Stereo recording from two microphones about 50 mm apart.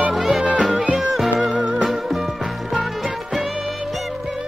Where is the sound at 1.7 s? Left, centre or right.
Centre.